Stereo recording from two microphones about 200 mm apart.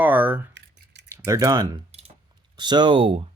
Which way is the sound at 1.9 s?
30° right (ahead or behind).